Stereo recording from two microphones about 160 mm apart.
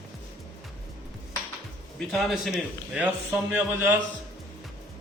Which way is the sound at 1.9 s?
Centre (ahead or behind).